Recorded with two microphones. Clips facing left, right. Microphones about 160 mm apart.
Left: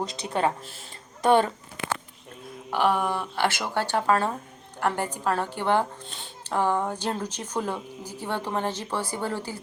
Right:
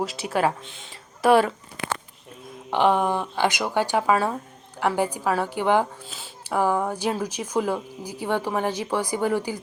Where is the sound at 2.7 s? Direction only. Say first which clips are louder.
Right 4 dB; 20° right (ahead or behind).